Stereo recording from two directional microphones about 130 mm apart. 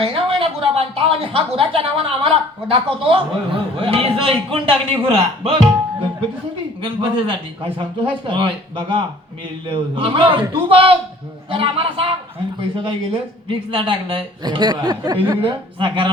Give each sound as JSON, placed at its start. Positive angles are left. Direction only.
{"t": 0.0, "sound": "speech", "side_deg": -45}
{"t": 6.8, "sound": "a man's voice", "side_deg": -40}
{"t": 15.4, "sound": "speech", "side_deg": -40}